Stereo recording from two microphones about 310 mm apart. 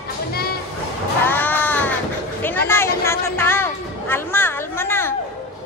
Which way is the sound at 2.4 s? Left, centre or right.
Centre.